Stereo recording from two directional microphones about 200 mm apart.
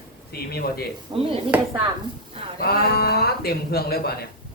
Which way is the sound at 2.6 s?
50° left (ahead or behind).